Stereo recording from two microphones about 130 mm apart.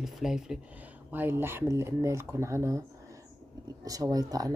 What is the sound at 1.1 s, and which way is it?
Speech, 15° right (ahead or behind).